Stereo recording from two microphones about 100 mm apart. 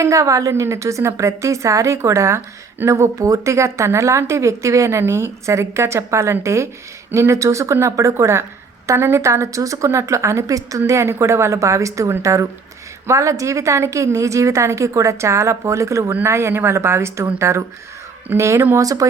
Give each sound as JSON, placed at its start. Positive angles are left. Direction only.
{"t": 0.0, "sound": "a woman's voice", "side_deg": -30}